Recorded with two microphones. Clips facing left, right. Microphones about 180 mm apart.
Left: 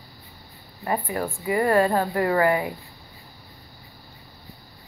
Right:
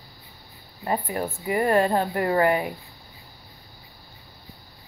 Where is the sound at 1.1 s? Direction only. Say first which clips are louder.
Left 1 dB; 20° right (ahead or behind).